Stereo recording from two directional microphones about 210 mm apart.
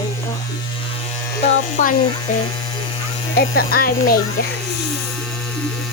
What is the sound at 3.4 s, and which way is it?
Speech, 45° left (ahead or behind).